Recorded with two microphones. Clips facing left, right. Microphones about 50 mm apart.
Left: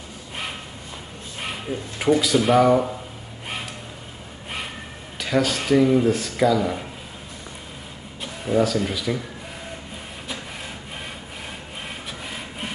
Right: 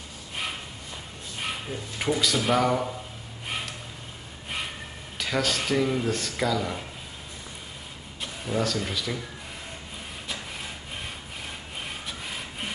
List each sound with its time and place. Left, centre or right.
1.4 s a sound: centre
2.1 s speech: centre
5.2 s speech: centre
8.2 s speech: centre